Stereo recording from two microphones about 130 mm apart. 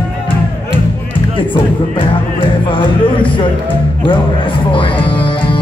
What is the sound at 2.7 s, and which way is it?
Music, 40° left (ahead or behind).